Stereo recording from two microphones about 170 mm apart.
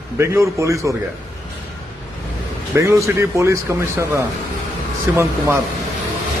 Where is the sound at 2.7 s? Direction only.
15° right (ahead or behind).